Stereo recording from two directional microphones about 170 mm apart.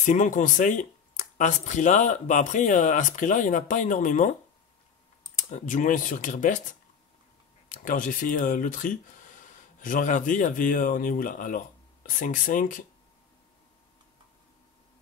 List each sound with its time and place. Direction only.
0.0 s speech: 45° left (ahead or behind)
5.5 s speech: 50° left (ahead or behind)